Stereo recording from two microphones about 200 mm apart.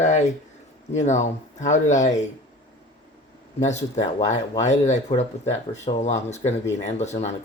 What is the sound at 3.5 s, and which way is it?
Speech, 35° left (ahead or behind).